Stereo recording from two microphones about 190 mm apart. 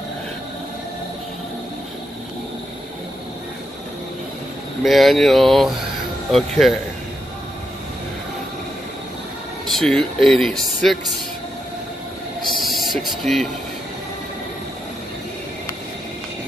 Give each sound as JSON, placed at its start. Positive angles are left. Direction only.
{"t": 4.8, "sound": "speech", "side_deg": 0}
{"t": 9.7, "sound": "speech", "side_deg": 0}
{"t": 12.5, "sound": "a sound", "side_deg": 0}